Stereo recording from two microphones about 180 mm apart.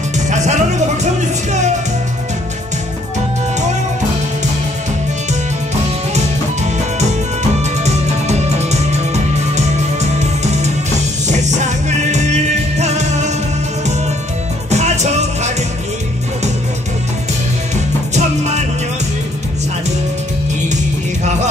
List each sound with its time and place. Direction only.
0.3 s music: 40° right (ahead or behind)
6.1 s music: 40° right (ahead or behind)
14.7 s music: 40° right (ahead or behind)
18.1 s music: 40° right (ahead or behind)
21.2 s music: 40° right (ahead or behind)